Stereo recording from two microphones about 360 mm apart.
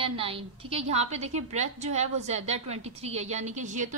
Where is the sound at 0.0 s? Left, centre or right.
Centre.